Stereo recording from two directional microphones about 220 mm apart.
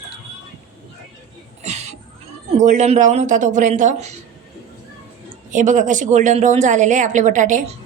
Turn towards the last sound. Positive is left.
turn(degrees=-35)  # may be behind; listen again after turning